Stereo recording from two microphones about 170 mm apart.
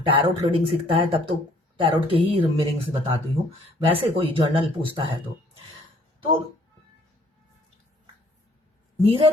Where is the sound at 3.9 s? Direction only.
30° right (ahead or behind).